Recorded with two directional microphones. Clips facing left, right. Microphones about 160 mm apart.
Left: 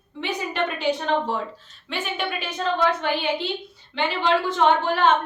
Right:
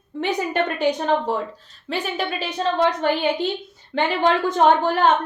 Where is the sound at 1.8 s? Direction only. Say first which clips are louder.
Right 3 dB; 35° right (ahead or behind).